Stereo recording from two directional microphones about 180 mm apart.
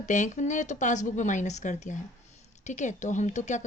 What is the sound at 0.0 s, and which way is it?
Speech, 45° left (ahead or behind).